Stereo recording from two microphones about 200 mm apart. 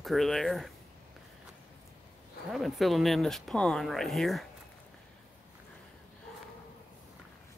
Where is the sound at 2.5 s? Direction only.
Centre (ahead or behind).